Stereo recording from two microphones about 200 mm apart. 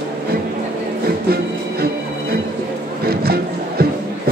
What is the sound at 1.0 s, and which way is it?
Music, 50° right (ahead or behind).